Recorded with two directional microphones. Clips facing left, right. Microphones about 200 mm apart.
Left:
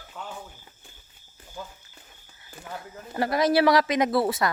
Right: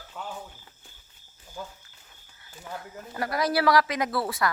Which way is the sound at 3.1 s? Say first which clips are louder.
Left 5 dB; 25° left (ahead or behind).